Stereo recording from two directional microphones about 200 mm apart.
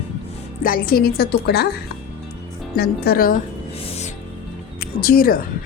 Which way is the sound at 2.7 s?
50° left (ahead or behind).